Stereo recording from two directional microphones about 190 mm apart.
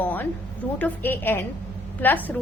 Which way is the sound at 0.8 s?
10° left (ahead or behind).